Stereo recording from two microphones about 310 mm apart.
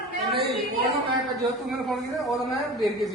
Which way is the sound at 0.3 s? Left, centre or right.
Right.